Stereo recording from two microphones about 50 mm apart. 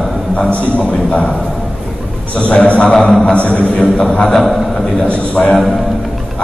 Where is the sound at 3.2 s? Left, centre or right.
Left.